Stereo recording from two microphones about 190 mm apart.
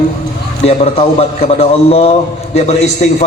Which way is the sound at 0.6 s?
30° left (ahead or behind).